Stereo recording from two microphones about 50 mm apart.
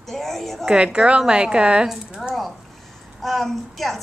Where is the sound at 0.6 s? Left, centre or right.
Centre.